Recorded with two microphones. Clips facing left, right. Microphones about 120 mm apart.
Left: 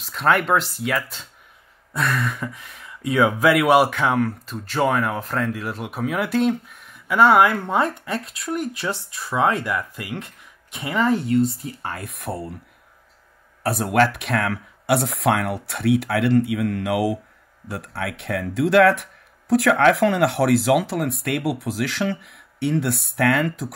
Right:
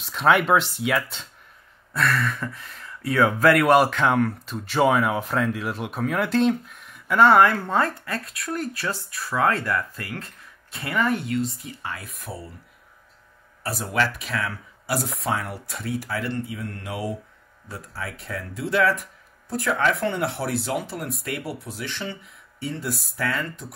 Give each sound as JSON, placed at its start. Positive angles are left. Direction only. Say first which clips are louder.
{"t": 0.0, "sound": "speech", "louder": "even", "side_deg": 0}
{"t": 2.0, "sound": "a sound", "louder": "even", "side_deg": 20}
{"t": 2.3, "sound": "speech", "louder": "left 1 dB", "side_deg": 5}
{"t": 3.4, "sound": "speech", "louder": "even", "side_deg": 5}
{"t": 12.2, "sound": "speech", "louder": "left 7 dB", "side_deg": 60}
{"t": 13.6, "sound": "speech", "louder": "left 6 dB", "side_deg": 60}
{"t": 17.6, "sound": "speech", "louder": "left 6 dB", "side_deg": 70}
{"t": 19.5, "sound": "speech", "louder": "left 7 dB", "side_deg": 80}
{"t": 21.2, "sound": "speech", "louder": "left 7 dB", "side_deg": 65}